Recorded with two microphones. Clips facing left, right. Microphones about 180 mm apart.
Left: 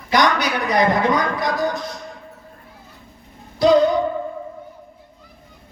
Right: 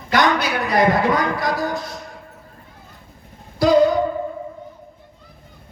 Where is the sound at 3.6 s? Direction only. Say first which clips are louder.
Even; 20° left (ahead or behind).